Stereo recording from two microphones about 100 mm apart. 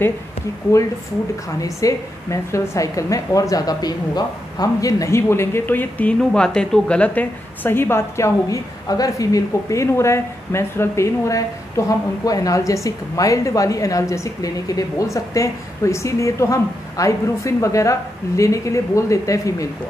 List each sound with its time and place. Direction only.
1.6 s a woman's voice: 35° left (ahead or behind)